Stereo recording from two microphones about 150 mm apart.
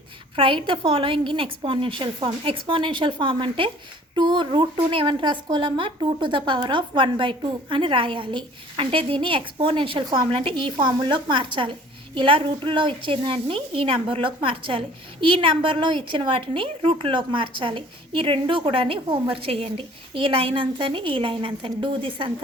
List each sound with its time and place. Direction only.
0.3 s a woman's voice: 35° right (ahead or behind)